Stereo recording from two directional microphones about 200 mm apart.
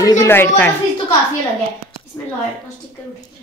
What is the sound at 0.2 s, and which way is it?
Speech, 10° left (ahead or behind).